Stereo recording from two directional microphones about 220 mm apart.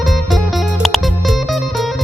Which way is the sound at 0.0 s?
Centre (ahead or behind).